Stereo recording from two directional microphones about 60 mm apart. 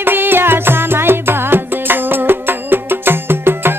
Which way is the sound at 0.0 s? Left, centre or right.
Right.